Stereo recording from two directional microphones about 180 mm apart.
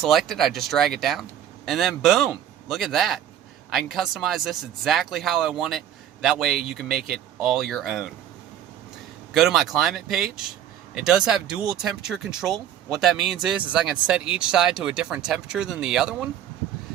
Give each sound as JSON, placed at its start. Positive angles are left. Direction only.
{"t": 0.0, "sound": "speech", "side_deg": 0}
{"t": 9.3, "sound": "speech", "side_deg": 0}